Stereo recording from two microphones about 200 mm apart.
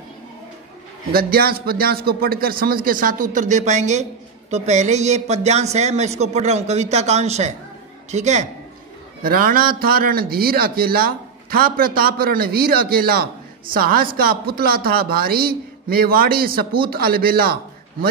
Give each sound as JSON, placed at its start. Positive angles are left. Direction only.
{"t": 1.1, "sound": "a man's voice", "side_deg": -50}
{"t": 9.2, "sound": "a man's voice", "side_deg": -45}